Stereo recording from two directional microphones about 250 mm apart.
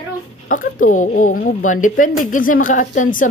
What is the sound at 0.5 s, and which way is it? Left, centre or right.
A woman's voice, left.